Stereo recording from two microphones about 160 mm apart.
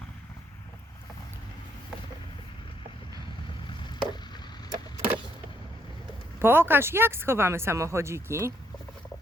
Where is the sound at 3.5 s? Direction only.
30° left (ahead or behind).